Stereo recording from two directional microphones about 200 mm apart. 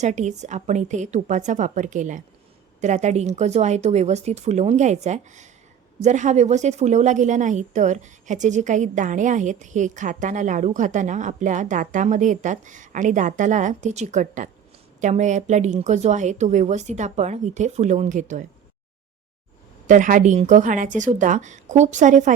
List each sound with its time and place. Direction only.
0.0 s a woman's voice: 35° right (ahead or behind)
19.9 s a woman's voice: 40° right (ahead or behind)